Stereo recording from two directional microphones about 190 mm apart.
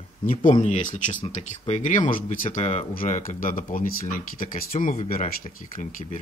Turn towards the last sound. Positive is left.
turn(degrees=45)  # may be behind; listen again after turning